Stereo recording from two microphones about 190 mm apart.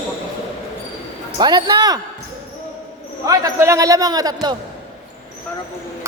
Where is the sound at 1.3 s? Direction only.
25° right (ahead or behind).